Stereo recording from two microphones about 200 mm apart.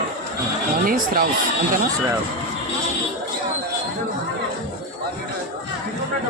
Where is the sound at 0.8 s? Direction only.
45° right (ahead or behind).